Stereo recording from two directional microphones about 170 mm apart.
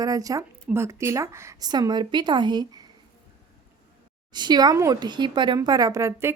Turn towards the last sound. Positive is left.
turn(degrees=-15)  # may be behind; listen again after turning